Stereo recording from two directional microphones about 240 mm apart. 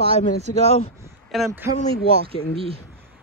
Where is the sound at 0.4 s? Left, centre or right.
Right.